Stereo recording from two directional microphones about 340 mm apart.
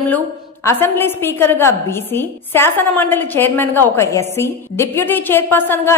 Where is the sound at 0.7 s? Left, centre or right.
Centre.